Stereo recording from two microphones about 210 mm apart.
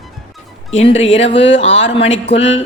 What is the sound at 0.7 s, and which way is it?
Speech, 30° left (ahead or behind).